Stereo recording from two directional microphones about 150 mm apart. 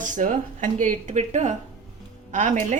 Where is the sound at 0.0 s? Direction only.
60° right (ahead or behind).